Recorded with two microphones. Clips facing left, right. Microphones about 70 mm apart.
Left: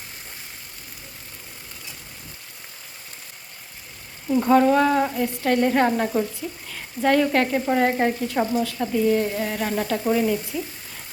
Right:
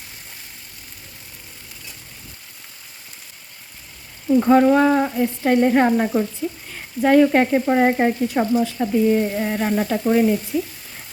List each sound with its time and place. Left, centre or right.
4.3 s frying: centre
6.7 s speech: centre
7.7 s frying: centre
10.1 s frying: right